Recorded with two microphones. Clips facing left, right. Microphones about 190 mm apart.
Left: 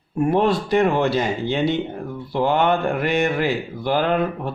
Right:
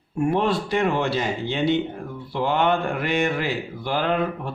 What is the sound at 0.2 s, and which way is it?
Speech, 40° left (ahead or behind).